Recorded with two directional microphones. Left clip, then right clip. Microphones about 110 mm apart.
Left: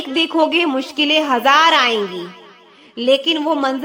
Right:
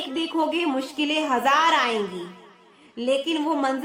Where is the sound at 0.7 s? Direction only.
25° left (ahead or behind).